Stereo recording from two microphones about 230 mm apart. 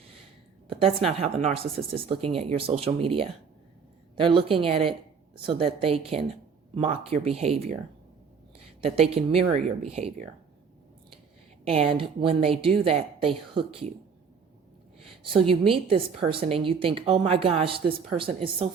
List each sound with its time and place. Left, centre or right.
1.0 s a woman's voice: right
8.8 s a woman's voice: right
11.6 s a woman's voice: right
15.4 s a woman's voice: right